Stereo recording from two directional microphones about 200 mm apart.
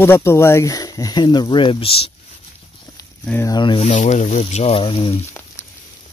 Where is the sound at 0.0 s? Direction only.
10° left (ahead or behind); by 2.1 s 30° left (ahead or behind).